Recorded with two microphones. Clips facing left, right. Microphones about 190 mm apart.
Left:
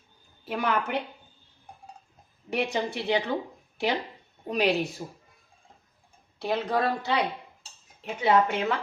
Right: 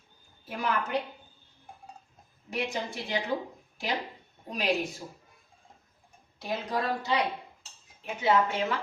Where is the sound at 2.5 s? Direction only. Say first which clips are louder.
Left 5 dB; 65° left (ahead or behind).